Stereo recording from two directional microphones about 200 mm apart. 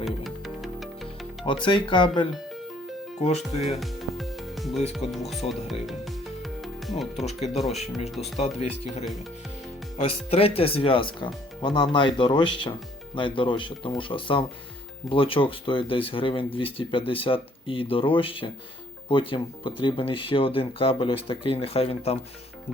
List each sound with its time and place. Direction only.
0.0 s music: centre (ahead or behind)
1.5 s speech: 25° left (ahead or behind)
3.6 s music: centre (ahead or behind)
4.9 s speech: centre (ahead or behind)
5.8 s music: centre (ahead or behind)
7.3 s speech: 30° left (ahead or behind)